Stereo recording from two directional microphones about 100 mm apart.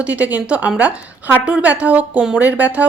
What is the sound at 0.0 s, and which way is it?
A woman's voice, 15° right (ahead or behind).